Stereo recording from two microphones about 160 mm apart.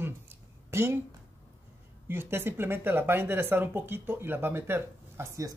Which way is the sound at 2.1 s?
15° right (ahead or behind).